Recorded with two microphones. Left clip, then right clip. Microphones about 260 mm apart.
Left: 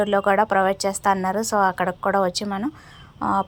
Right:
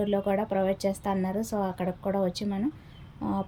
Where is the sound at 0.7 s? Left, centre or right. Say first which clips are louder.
Left 5 dB; centre.